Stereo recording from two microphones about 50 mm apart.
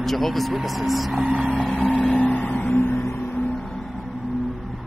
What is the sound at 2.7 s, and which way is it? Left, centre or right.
Vehicle, left.